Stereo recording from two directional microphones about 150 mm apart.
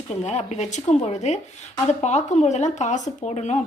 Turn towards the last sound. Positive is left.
turn(degrees=50)  # may be behind; listen again after turning